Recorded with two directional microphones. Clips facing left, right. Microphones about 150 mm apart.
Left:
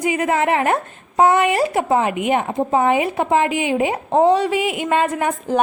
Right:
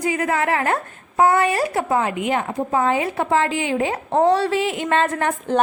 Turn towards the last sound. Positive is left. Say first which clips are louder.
# left 1 dB
turn(degrees=10)  # may be behind; listen again after turning